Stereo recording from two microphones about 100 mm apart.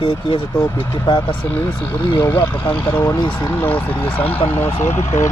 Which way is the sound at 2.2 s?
20° left (ahead or behind).